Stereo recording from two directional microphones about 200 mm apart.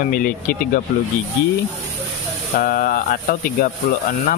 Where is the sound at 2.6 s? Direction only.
45° left (ahead or behind).